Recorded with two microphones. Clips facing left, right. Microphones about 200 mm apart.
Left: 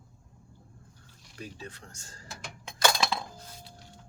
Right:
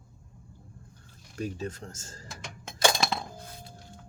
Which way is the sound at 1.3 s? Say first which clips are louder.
Right 9 dB; 45° right (ahead or behind).